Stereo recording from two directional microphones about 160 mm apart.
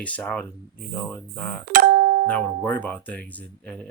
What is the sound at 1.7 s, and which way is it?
Ding-dong, 60° right (ahead or behind).